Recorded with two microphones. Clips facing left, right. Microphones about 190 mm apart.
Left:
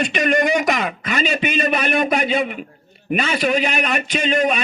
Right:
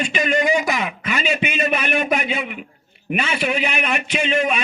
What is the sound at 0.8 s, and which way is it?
A man's voice, 35° left (ahead or behind).